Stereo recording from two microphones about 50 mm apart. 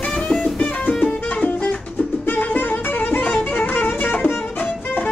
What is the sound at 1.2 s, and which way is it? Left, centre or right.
Music, left.